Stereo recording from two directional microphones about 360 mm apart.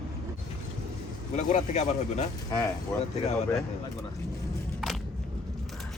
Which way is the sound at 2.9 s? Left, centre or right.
Centre.